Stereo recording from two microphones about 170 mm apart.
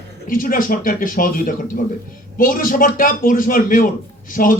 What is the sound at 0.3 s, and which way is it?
A man's voice, 55° left (ahead or behind).